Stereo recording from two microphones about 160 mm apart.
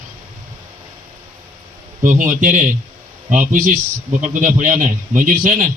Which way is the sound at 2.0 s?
55° right (ahead or behind).